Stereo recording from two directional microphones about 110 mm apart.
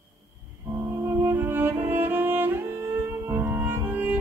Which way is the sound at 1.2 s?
20° right (ahead or behind).